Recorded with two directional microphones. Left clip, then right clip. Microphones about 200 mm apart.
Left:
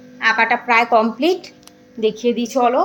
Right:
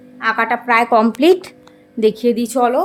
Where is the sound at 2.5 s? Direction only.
30° right (ahead or behind).